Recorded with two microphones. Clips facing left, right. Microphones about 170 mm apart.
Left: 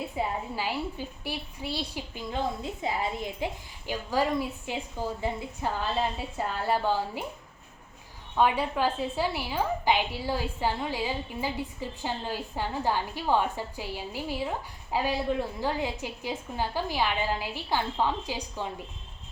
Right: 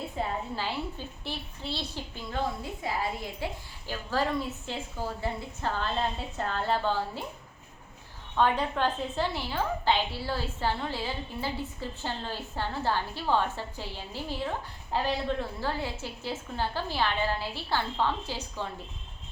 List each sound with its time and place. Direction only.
0.2 s a woman's voice: 10° left (ahead or behind)
8.4 s a woman's voice: 10° left (ahead or behind)